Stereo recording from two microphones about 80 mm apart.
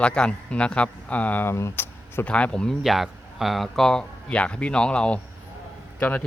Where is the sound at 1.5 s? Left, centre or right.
Left.